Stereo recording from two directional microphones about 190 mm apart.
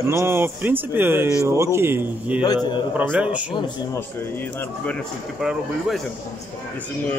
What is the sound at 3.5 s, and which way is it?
Speech, 15° left (ahead or behind).